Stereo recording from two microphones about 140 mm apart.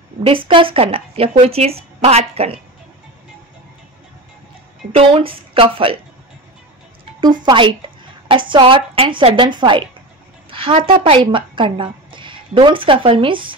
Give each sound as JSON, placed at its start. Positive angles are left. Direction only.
{"t": 0.2, "sound": "speech", "side_deg": -40}
{"t": 4.9, "sound": "a woman's voice", "side_deg": -40}
{"t": 7.4, "sound": "a woman's voice", "side_deg": -35}